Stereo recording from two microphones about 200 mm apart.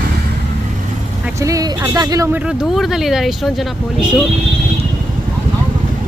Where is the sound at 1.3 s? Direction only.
15° right (ahead or behind).